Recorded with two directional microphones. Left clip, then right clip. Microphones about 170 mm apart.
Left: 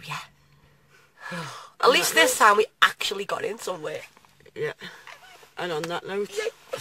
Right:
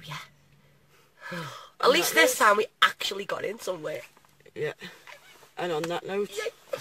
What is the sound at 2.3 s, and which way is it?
Speech, 30° left (ahead or behind).